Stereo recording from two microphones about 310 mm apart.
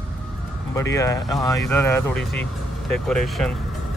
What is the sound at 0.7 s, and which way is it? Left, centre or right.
Speech, centre.